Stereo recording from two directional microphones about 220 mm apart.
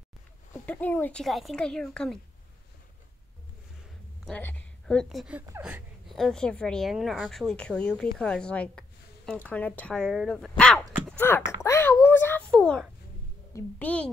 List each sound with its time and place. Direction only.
0.7 s speech: 5° left (ahead or behind)
4.3 s speech: 10° left (ahead or behind)
10.6 s a sound: 5° left (ahead or behind)
13.6 s a child's voice: 5° left (ahead or behind)